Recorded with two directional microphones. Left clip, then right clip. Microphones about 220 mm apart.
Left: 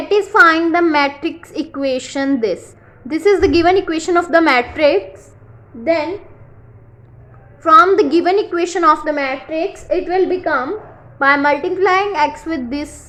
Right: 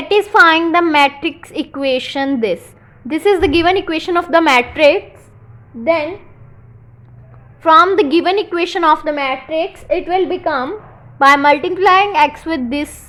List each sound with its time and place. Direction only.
0.1 s a woman's voice: 20° right (ahead or behind)
7.6 s a woman's voice: 20° right (ahead or behind)
11.2 s a woman's voice: 20° right (ahead or behind)